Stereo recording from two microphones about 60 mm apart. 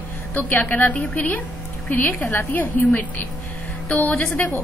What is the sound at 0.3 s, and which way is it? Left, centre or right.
A woman's voice, left.